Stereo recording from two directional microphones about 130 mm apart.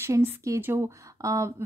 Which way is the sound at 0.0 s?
20° right (ahead or behind).